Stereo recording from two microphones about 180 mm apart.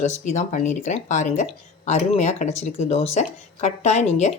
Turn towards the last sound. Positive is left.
turn(degrees=40)  # may be behind; listen again after turning